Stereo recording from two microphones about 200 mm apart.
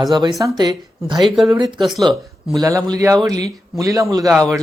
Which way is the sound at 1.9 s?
Centre (ahead or behind).